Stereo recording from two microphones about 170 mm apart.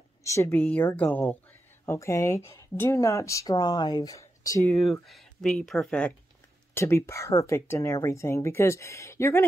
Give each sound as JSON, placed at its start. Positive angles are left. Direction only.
{"t": 0.2, "sound": "speech", "side_deg": 15}
{"t": 4.6, "sound": "speech", "side_deg": 0}